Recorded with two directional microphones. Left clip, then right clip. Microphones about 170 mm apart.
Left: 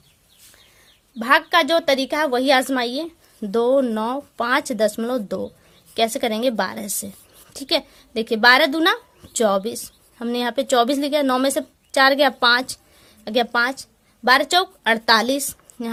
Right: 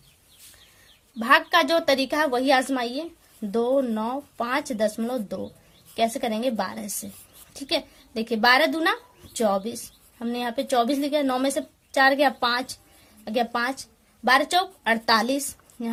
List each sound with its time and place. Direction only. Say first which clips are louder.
1.2 s a woman's voice: left 2 dB; 35° left (ahead or behind)